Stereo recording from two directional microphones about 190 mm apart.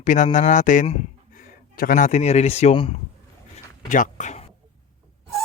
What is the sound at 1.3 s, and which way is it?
Speech, 50° left (ahead or behind).